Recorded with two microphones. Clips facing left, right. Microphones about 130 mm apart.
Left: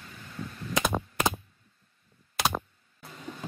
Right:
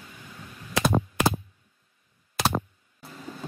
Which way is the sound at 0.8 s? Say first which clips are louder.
Right 6 dB; 5° right (ahead or behind).